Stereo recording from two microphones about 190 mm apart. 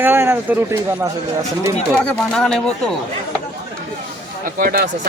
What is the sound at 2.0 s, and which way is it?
Speech, 5° left (ahead or behind).